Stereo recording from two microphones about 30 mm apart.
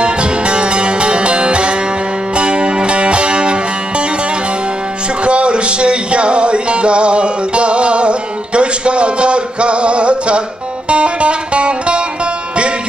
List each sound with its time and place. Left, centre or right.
0.0 s music: right
5.2 s music: right